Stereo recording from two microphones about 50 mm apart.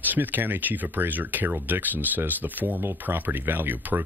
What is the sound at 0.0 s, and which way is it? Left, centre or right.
Speech, right.